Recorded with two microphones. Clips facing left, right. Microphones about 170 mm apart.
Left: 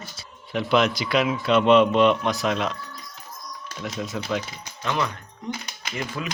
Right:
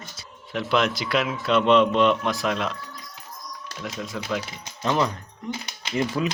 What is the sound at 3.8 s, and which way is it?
Speech, centre (ahead or behind).